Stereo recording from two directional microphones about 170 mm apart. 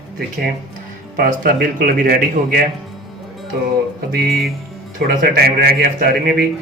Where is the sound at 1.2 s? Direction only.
60° right (ahead or behind).